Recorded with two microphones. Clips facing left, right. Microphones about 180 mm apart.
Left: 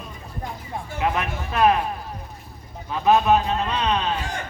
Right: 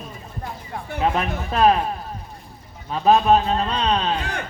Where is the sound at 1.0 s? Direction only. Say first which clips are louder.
Right 3 dB; 30° right (ahead or behind).